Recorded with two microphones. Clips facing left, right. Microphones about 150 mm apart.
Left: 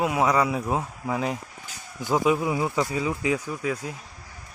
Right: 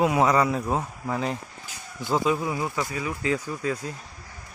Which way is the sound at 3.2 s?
10° left (ahead or behind).